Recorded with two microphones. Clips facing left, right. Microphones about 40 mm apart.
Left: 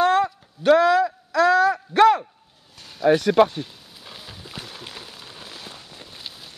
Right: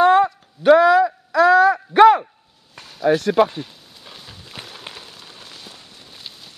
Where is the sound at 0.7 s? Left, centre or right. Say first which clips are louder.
Right 4 dB; centre.